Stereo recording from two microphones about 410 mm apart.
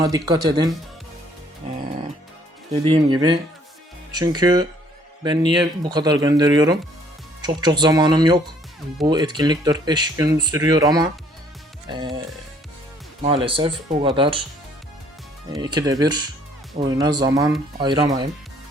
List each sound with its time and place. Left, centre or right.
0.0 s speech: centre
1.6 s music: centre
2.7 s speech: centre
13.2 s speech: centre
15.4 s speech: centre